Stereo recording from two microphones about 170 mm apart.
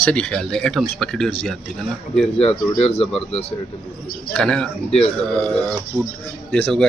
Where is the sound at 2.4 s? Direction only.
35° left (ahead or behind).